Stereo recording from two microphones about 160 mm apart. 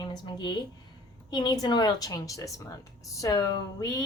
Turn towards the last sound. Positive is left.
turn(degrees=20)  # may be behind; listen again after turning